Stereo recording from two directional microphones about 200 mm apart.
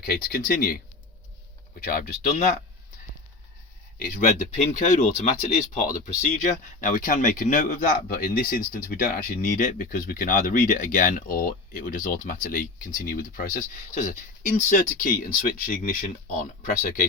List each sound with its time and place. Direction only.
0.0 s speech: 50° left (ahead or behind)
1.9 s speech: 40° left (ahead or behind)
3.9 s speech: 40° left (ahead or behind)
6.8 s speech: 40° left (ahead or behind)